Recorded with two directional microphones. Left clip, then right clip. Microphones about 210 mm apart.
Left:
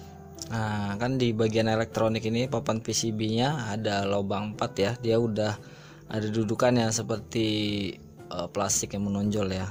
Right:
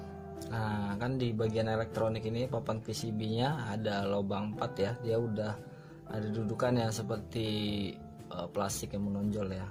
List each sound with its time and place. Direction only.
0.3 s speech: 30° left (ahead or behind)